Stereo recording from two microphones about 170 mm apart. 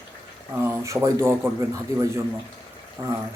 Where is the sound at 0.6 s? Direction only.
15° right (ahead or behind).